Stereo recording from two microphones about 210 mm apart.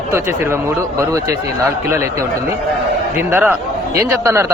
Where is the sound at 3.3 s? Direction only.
10° right (ahead or behind).